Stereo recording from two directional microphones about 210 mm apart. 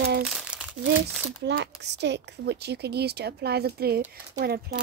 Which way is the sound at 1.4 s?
55° right (ahead or behind).